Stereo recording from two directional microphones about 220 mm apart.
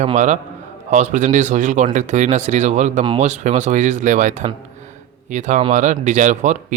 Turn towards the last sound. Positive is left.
turn(degrees=-35)  # may be behind; listen again after turning